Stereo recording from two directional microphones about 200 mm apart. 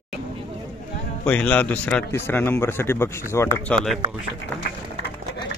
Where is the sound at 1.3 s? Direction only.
5° left (ahead or behind).